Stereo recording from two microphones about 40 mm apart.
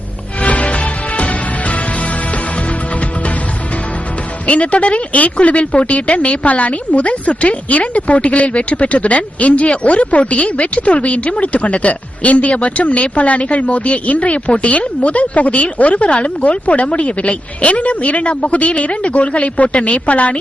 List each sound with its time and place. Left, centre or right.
0.4 s music: left
4.4 s speech: left